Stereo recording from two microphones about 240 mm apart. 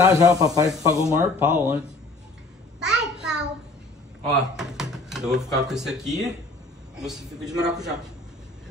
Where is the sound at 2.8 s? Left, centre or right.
Centre.